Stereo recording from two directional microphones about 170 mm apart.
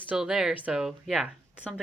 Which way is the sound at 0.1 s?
5° right (ahead or behind).